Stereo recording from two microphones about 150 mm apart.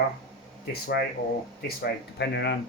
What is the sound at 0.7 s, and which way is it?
Speech, 90° left.